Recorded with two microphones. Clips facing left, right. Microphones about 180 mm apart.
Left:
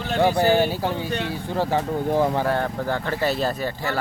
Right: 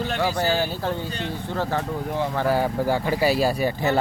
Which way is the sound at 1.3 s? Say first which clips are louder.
Left 2 dB; 15° left (ahead or behind).